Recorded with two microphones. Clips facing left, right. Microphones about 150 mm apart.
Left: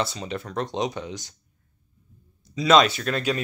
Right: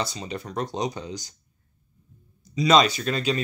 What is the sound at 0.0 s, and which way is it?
Speech, centre (ahead or behind).